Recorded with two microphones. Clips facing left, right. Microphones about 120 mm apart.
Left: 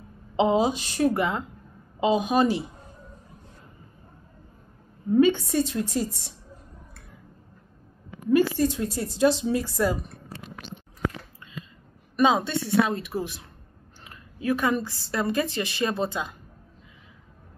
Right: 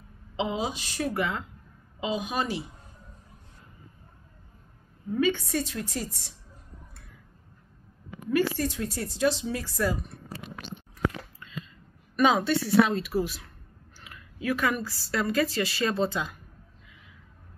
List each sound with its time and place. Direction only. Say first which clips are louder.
0.4 s a woman's voice: left 8 dB; 30° left (ahead or behind)
5.1 s a woman's voice: left 6 dB; 25° left (ahead or behind)
8.3 s a woman's voice: left 5 dB; 20° left (ahead or behind)
12.2 s a woman's voice: left 1 dB; 20° left (ahead or behind)